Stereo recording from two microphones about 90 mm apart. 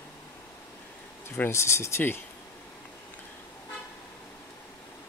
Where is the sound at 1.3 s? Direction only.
25° left (ahead or behind).